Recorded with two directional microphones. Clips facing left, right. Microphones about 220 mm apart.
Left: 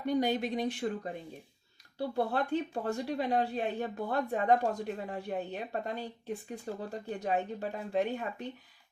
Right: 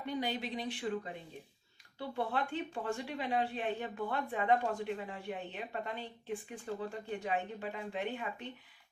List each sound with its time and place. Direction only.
0.0 s speech: 45° left (ahead or behind)